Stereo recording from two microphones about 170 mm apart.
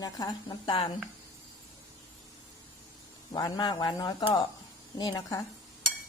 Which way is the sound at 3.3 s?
25° left (ahead or behind).